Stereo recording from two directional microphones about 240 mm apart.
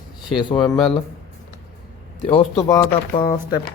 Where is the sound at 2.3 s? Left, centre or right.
Centre.